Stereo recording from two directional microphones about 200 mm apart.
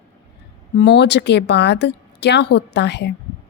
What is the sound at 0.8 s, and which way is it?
A woman's voice, 60° left (ahead or behind).